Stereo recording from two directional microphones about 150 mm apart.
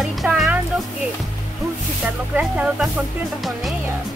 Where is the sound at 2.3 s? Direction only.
5° right (ahead or behind).